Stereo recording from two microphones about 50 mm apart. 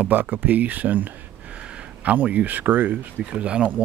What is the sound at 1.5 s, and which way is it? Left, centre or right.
Speech, right.